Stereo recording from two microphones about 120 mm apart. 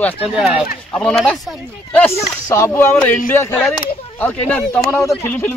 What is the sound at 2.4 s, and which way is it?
A man's voice, 25° left (ahead or behind).